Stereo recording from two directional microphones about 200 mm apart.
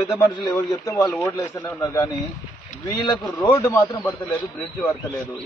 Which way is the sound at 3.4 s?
15° left (ahead or behind).